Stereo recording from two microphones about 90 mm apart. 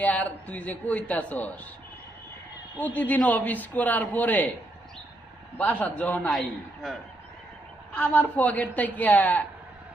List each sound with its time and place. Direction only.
0.0 s a man's voice: 20° left (ahead or behind)
2.7 s a man's voice: 15° left (ahead or behind)
5.5 s a man's voice: 20° left (ahead or behind)
7.9 s a man's voice: 20° left (ahead or behind)